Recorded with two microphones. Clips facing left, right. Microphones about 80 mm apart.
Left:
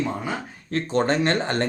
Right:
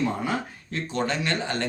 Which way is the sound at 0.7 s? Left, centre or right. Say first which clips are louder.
Left 6 dB; left.